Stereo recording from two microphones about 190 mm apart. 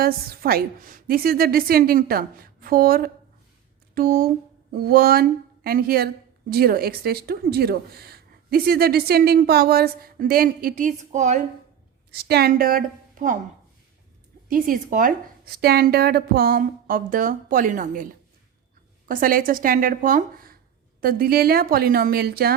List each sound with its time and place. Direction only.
0.0 s speech: 50° right (ahead or behind)
12.1 s a woman's voice: 55° right (ahead or behind)
14.4 s speech: 45° right (ahead or behind)